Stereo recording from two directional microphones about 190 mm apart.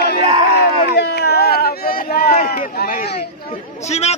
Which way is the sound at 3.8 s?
35° left (ahead or behind).